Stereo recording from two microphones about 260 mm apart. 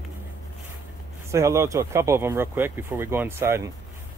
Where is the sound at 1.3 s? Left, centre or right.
Centre.